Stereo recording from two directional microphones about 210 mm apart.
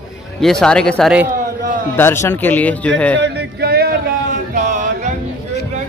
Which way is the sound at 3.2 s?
50° right (ahead or behind).